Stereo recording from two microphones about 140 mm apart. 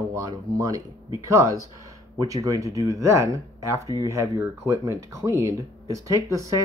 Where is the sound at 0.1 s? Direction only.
25° right (ahead or behind).